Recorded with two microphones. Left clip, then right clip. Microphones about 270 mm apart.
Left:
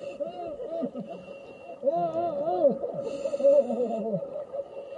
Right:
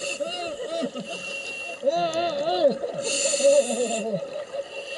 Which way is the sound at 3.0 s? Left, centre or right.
Centre.